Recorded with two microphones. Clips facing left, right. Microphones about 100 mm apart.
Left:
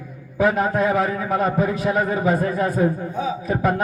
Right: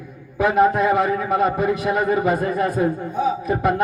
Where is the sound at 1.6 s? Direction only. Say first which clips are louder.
Right 1 dB; 65° right (ahead or behind).